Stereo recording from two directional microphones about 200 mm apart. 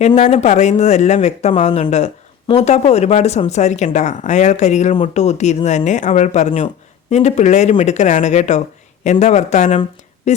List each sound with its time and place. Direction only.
0.2 s speech: 35° left (ahead or behind)